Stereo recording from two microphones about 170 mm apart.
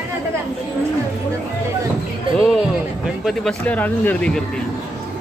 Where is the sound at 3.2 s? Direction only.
Centre (ahead or behind).